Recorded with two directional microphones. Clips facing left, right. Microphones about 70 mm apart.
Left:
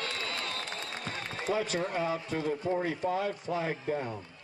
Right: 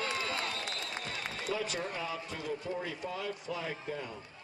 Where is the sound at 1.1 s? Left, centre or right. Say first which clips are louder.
Left 6 dB; left.